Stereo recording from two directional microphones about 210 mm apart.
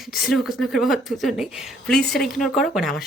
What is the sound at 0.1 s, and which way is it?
Speech, centre (ahead or behind).